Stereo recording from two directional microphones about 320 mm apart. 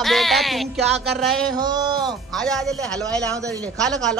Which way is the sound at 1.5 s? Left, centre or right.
Centre.